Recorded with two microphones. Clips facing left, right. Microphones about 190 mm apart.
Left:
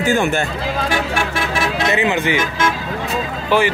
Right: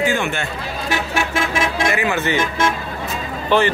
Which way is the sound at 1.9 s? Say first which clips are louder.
Left 2 dB; 20° left (ahead or behind).